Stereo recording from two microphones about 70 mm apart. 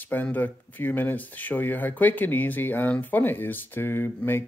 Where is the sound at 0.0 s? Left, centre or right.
Left.